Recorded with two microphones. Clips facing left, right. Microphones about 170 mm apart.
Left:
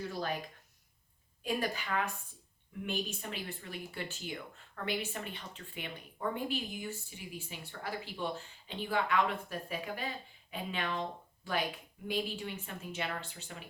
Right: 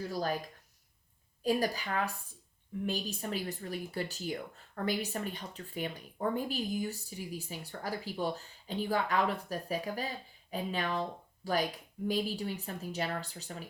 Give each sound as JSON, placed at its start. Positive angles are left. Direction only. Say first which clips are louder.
{"t": 0.1, "sound": "speech", "louder": "right 6 dB", "side_deg": -40}
{"t": 1.5, "sound": "speech", "louder": "right 4 dB", "side_deg": -40}